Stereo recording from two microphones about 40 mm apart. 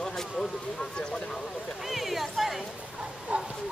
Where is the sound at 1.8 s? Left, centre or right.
Centre.